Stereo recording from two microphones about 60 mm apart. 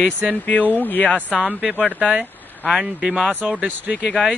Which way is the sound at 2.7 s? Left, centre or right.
Centre.